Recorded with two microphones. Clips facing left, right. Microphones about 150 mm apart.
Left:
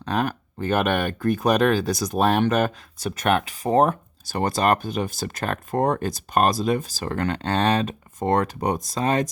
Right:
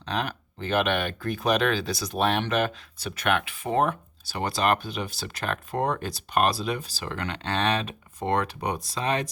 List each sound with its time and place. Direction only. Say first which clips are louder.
0.0 s speech: left 5 dB; 45° left (ahead or behind)